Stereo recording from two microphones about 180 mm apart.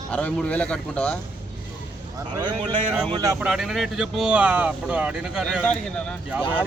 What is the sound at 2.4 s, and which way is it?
Speech, 25° right (ahead or behind).